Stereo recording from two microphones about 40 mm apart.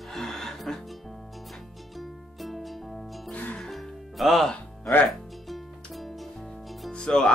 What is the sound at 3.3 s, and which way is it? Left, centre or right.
Music, left.